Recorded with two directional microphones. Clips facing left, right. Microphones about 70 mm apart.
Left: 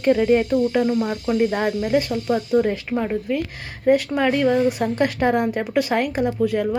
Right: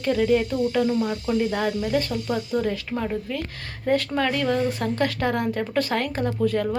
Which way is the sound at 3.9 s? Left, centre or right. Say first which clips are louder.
Left 5 dB; centre.